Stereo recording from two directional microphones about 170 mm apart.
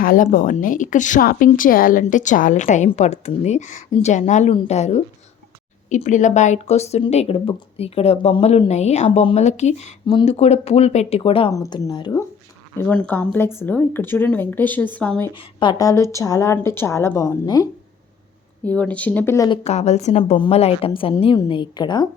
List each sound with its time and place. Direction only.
0.0 s speech: 55° left (ahead or behind); by 11.5 s 30° left (ahead or behind)
11.5 s speech: 20° left (ahead or behind)
12.7 s speech: 10° left (ahead or behind)
15.4 s speech: 25° left (ahead or behind)
18.6 s speech: 10° left (ahead or behind)
19.5 s speech: 40° left (ahead or behind)